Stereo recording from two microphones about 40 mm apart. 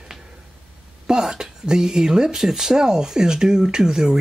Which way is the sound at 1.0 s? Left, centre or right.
Centre.